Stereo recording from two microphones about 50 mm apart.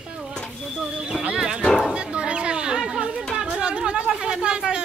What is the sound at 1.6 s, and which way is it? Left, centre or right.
Speech, centre.